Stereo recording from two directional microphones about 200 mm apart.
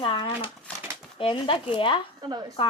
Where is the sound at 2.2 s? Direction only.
20° right (ahead or behind).